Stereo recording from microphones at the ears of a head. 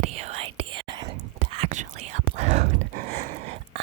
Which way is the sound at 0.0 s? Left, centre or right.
Right.